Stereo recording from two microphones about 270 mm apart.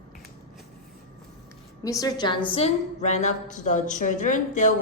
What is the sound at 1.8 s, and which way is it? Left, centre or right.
A woman's voice, centre.